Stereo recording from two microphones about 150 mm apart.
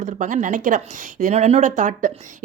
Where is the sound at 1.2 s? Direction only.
45° right (ahead or behind).